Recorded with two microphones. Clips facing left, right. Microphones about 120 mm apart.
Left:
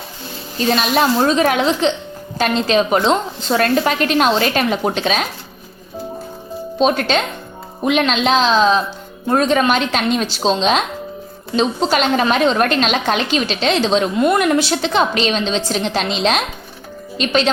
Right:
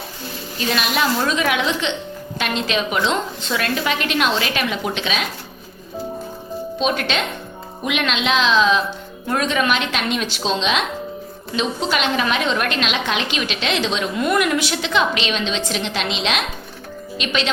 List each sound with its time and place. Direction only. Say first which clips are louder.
0.7 s a woman's voice: left 5 dB; 35° left (ahead or behind)
6.7 s a woman's voice: left 6 dB; 40° left (ahead or behind)